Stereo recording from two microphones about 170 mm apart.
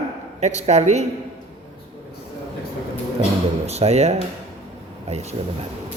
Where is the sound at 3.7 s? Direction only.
40° right (ahead or behind).